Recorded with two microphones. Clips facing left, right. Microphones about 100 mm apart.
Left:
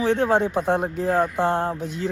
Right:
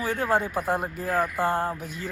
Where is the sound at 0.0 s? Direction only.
5° right (ahead or behind).